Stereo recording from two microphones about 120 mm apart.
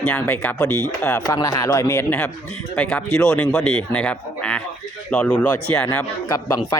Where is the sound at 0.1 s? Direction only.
20° left (ahead or behind).